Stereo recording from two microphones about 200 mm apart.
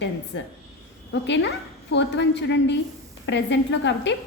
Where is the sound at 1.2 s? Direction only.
60° left (ahead or behind).